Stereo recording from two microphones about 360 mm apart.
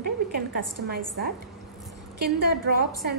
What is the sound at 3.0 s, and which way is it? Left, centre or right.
Speech, right.